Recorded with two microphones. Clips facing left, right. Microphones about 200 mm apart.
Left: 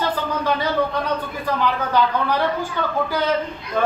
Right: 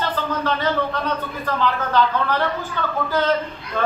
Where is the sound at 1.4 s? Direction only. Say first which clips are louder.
Right 1 dB; 10° left (ahead or behind).